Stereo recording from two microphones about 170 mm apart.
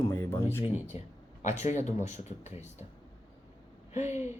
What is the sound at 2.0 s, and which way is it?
Speech, 40° left (ahead or behind).